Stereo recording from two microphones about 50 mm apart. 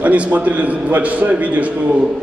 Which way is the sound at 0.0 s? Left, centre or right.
Right.